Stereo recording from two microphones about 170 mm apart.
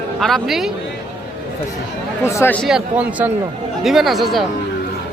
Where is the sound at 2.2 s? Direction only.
15° left (ahead or behind).